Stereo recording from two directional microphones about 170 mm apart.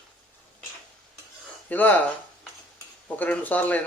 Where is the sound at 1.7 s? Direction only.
10° left (ahead or behind).